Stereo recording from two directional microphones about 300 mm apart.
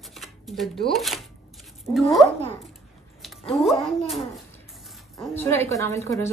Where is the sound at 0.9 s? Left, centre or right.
Centre.